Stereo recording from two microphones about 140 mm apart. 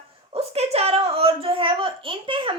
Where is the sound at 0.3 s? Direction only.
45° right (ahead or behind).